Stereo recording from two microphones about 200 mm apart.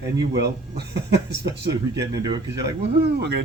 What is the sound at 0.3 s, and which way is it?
Speech, 55° right (ahead or behind).